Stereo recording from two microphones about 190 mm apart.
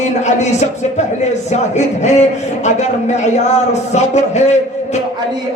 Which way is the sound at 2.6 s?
35° left (ahead or behind).